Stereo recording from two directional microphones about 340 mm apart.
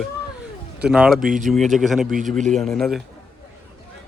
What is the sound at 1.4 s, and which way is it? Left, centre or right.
Speech, centre.